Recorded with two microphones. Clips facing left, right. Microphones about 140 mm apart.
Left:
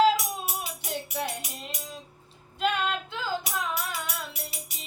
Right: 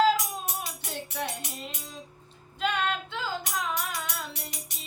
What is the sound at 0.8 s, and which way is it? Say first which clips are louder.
Music: left 4 dB; 10° left (ahead or behind).